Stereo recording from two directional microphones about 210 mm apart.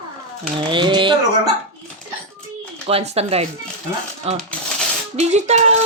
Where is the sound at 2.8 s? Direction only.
30° right (ahead or behind).